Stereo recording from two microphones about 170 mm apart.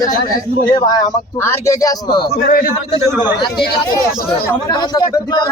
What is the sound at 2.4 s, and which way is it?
Speech, 60° left (ahead or behind).